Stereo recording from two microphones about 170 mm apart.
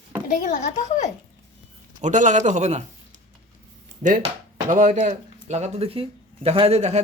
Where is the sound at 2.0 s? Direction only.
45° right (ahead or behind).